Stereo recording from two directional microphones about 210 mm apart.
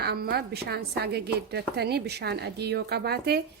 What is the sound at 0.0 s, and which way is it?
A woman's voice, 45° right (ahead or behind).